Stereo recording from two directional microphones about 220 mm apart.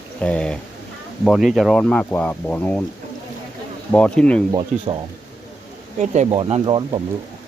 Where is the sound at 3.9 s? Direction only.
5° left (ahead or behind).